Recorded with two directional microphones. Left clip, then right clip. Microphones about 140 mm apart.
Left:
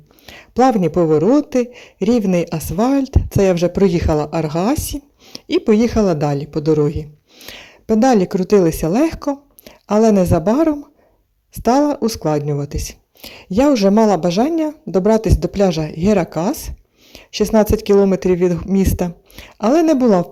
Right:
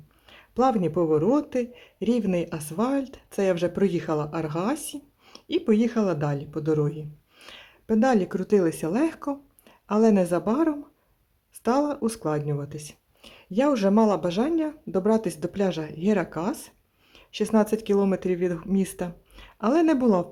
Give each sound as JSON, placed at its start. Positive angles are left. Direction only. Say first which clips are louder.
{"t": 0.3, "sound": "speech", "louder": "left 9 dB", "side_deg": 30}